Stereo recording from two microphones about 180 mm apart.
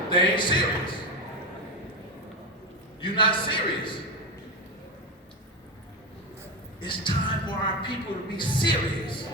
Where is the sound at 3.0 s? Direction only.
25° left (ahead or behind).